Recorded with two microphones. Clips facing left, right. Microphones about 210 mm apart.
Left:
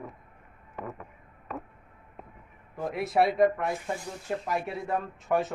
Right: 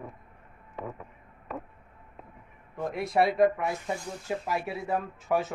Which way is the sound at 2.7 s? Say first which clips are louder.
Even; centre (ahead or behind).